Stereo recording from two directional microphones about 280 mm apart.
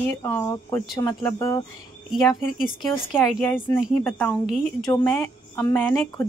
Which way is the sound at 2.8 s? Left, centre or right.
Centre.